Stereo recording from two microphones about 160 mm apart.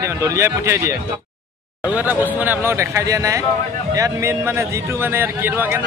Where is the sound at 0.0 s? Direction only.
20° right (ahead or behind).